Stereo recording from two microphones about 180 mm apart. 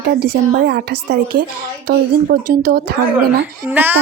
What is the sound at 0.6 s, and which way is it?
Speech, 65° right (ahead or behind).